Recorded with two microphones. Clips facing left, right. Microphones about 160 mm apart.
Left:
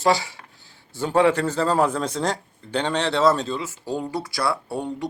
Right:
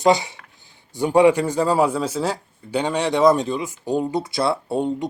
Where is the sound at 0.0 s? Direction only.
20° right (ahead or behind).